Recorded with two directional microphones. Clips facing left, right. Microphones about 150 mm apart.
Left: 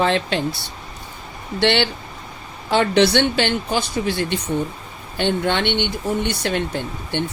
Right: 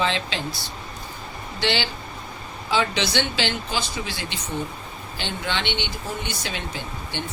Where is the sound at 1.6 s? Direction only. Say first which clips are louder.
Left 7 dB; 60° left (ahead or behind).